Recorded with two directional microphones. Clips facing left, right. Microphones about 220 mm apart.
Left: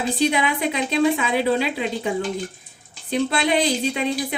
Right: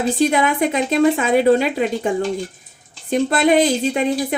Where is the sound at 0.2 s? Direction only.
45° right (ahead or behind).